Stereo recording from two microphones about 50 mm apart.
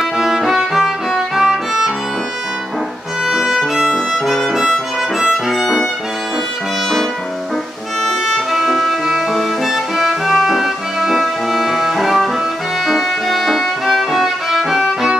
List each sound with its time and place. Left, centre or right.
0.0 s music: centre
3.3 s violin: centre
4.5 s harmonica: centre
5.5 s violin: centre
8.5 s music: centre